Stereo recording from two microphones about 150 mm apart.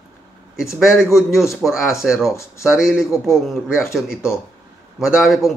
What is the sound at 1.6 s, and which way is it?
A man's voice, 5° right (ahead or behind).